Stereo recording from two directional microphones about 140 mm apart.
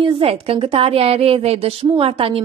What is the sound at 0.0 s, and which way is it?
A woman's voice, 40° right (ahead or behind).